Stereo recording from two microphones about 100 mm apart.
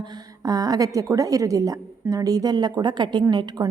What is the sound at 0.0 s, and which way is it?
A woman's voice, 45° right (ahead or behind).